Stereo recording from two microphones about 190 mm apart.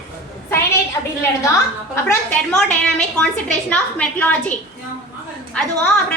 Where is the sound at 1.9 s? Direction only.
15° left (ahead or behind).